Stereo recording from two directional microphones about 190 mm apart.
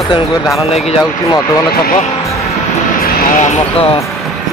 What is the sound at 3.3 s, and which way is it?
Speech, 35° left (ahead or behind).